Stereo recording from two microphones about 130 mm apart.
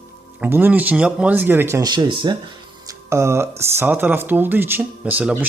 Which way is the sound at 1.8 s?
35° right (ahead or behind).